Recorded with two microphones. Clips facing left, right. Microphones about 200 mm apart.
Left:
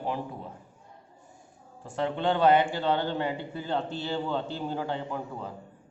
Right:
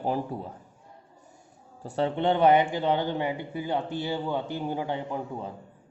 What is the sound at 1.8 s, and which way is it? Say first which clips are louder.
Speech: right 3 dB; 35° right (ahead or behind).